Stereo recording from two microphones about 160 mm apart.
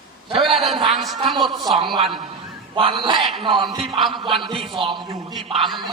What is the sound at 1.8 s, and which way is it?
A man's voice, 30° right (ahead or behind).